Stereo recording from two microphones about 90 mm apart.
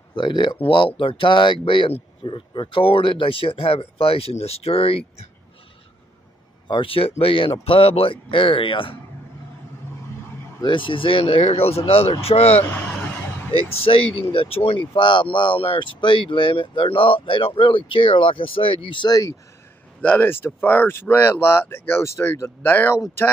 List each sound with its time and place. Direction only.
0.1 s speech: 60° left (ahead or behind); by 5.0 s 90° left
6.7 s speech: 80° left
10.6 s speech: 65° left (ahead or behind); by 12.4 s 90° left
12.7 s a sound: 15° left (ahead or behind)
13.5 s speech: 90° left
19.0 s speech: 45° left (ahead or behind)
20.0 s speech: 20° left (ahead or behind)